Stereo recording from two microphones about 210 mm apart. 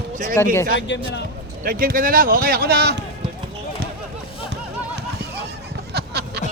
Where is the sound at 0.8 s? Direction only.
60° left (ahead or behind).